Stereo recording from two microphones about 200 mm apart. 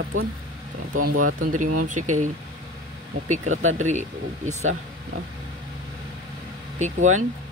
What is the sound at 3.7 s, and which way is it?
Speech, 35° right (ahead or behind).